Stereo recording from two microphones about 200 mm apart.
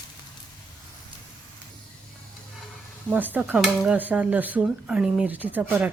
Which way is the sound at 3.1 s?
10° right (ahead or behind).